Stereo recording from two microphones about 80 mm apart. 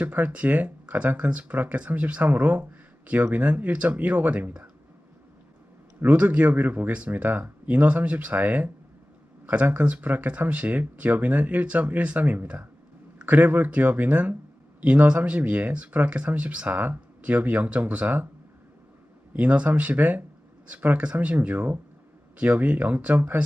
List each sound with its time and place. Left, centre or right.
0.0 s speech: right
6.0 s speech: centre
19.3 s speech: centre